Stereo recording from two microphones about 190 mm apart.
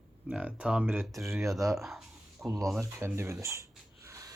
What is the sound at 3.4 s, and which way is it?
Dog, 15° right (ahead or behind).